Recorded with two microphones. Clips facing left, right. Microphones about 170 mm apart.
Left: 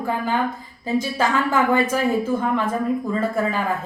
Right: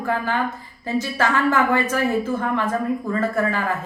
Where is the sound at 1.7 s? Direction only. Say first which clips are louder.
Left 1 dB; 10° left (ahead or behind).